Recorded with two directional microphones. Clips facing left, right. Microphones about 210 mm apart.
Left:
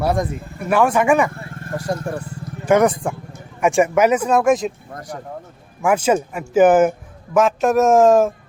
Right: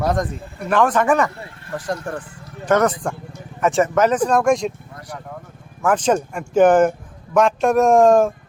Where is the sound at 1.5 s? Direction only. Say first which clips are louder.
Left 2 dB; 45° left (ahead or behind).